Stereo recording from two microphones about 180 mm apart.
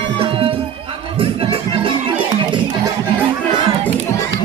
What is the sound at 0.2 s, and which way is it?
Music, 30° right (ahead or behind).